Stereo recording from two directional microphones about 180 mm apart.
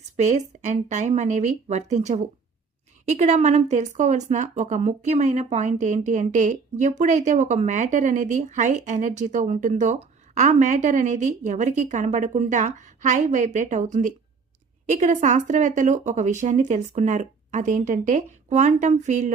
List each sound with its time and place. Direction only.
0.2 s a woman's voice: 40° right (ahead or behind)